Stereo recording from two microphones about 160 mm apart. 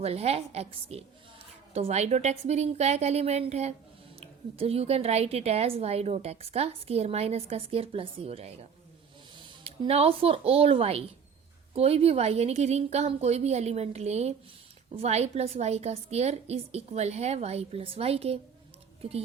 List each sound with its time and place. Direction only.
0.0 s a woman's voice: 40° right (ahead or behind)
9.6 s a woman's voice: 40° right (ahead or behind)